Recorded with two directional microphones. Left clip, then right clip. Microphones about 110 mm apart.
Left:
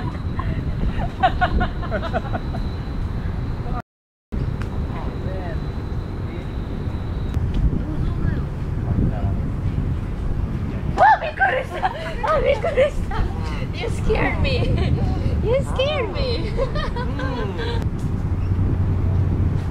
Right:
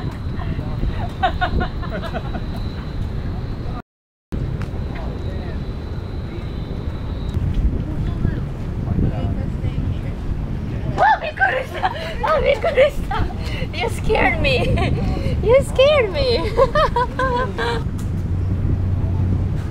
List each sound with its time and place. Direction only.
1.2 s a sound: centre (ahead or behind)
11.0 s hubbub: 5° right (ahead or behind); by 13.2 s 20° right (ahead or behind)
13.7 s vehicle: 30° right (ahead or behind)
15.4 s speech: 30° right (ahead or behind)